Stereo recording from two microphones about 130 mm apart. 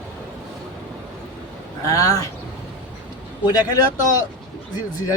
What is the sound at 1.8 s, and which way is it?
Speech, 25° left (ahead or behind).